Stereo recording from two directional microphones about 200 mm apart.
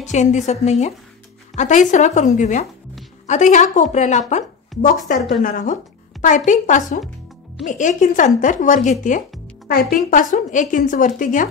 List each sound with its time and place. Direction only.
0.0 s a woman's voice: 35° left (ahead or behind)